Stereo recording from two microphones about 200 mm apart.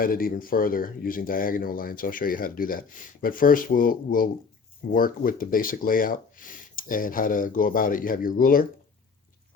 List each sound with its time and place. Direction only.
0.0 s speech: 45° left (ahead or behind)